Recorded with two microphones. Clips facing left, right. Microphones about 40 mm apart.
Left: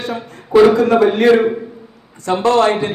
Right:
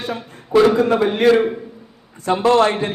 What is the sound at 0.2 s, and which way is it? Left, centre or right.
A man's voice, centre.